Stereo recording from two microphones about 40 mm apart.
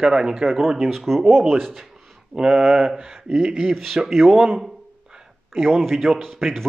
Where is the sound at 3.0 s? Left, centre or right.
Centre.